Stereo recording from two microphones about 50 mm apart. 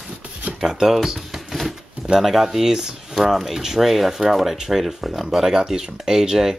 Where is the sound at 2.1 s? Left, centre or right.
Centre.